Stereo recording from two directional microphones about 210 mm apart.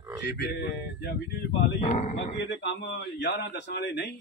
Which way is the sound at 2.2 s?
55° left (ahead or behind).